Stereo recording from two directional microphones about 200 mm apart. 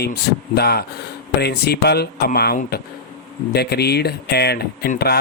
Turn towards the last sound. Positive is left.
turn(degrees=50)  # may be behind; listen again after turning